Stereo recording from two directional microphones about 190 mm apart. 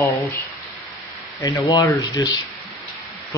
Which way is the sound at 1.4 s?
20° left (ahead or behind).